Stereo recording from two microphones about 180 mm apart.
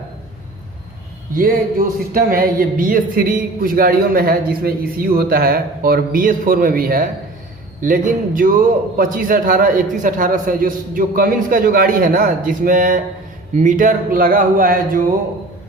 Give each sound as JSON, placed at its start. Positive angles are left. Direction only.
{"t": 2.1, "sound": "a man's voice", "side_deg": -55}